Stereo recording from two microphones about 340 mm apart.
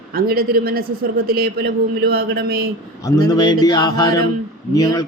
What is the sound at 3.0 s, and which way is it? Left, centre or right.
Mantra, centre.